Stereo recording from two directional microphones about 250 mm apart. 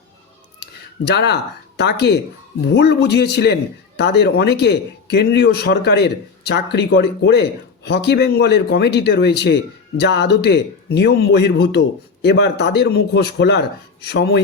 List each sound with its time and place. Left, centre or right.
0.6 s a man's voice: left